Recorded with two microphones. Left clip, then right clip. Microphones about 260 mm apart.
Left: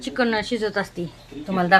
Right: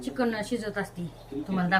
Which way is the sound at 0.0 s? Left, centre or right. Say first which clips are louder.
Left 7 dB; centre.